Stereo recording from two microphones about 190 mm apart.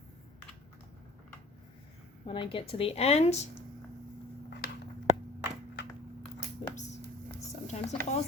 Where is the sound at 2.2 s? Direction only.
25° left (ahead or behind).